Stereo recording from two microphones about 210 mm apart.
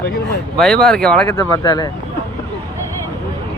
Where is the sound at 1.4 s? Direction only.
15° left (ahead or behind).